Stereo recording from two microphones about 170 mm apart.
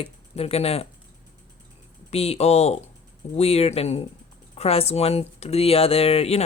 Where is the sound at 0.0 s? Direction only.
35° left (ahead or behind).